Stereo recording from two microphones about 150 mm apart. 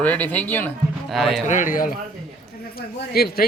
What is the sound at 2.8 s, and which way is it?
Speech, 90° left.